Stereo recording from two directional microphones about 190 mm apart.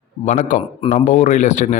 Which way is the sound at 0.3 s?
40° left (ahead or behind).